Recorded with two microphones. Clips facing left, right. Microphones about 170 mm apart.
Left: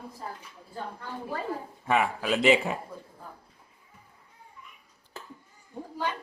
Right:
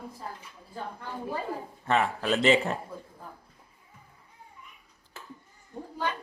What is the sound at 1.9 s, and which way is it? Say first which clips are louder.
Speech: even; 5° left (ahead or behind).